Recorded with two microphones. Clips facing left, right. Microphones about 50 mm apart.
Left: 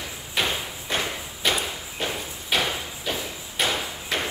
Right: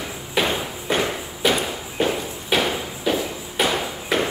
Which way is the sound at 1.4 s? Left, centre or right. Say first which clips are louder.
Right 5 dB; centre.